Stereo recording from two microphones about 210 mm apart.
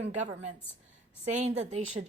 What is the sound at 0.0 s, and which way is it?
A woman's voice, 35° right (ahead or behind).